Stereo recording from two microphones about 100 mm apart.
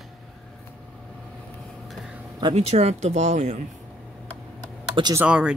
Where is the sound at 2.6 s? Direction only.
90° right.